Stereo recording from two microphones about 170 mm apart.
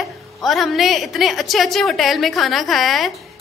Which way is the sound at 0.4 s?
Centre (ahead or behind).